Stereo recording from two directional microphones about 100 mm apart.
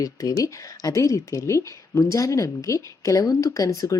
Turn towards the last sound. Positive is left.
turn(degrees=35)  # may be behind; listen again after turning